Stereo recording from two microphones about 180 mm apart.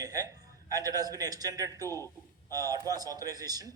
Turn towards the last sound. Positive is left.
turn(degrees=-20)  # may be behind; listen again after turning